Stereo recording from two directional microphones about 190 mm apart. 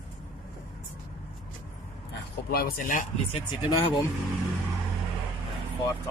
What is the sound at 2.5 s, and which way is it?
Speech, 50° left (ahead or behind).